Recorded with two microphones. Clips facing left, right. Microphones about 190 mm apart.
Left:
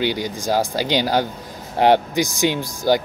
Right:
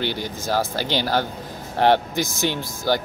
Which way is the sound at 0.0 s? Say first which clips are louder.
Left 4 dB; 15° left (ahead or behind).